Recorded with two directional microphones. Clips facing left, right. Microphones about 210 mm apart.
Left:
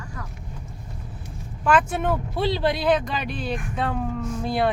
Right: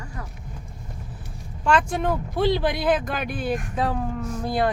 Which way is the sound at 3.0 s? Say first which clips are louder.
Right 1 dB; 50° right (ahead or behind).